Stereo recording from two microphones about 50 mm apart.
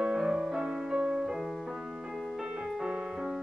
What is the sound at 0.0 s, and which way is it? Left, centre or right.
Music, centre.